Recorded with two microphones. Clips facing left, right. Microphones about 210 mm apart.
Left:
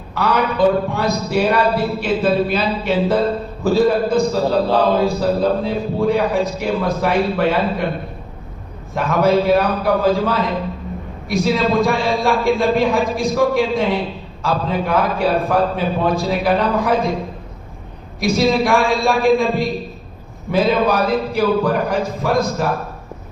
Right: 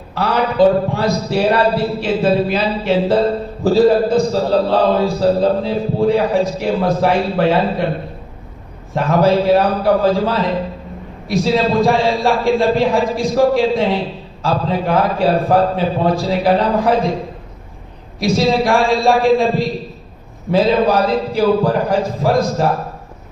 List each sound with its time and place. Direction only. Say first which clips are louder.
0.1 s a man's voice: right 1 dB; 30° right (ahead or behind)
9.0 s a man's voice: right 2 dB; 30° right (ahead or behind)
18.2 s a man's voice: right 1 dB; 30° right (ahead or behind)